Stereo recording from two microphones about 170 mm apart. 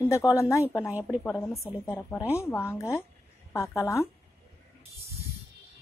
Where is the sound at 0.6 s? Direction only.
10° right (ahead or behind).